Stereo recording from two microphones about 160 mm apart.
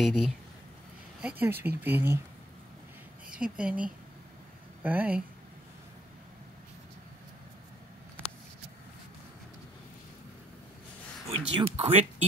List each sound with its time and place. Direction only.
0.0 s speech: centre (ahead or behind)
3.3 s speech: 5° right (ahead or behind)
11.2 s speech: 35° right (ahead or behind)